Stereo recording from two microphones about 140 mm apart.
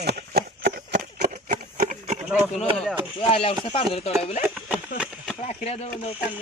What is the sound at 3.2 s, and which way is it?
Speech, 45° left (ahead or behind).